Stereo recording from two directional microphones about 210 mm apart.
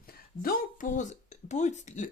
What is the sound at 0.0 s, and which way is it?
Speech, 45° left (ahead or behind).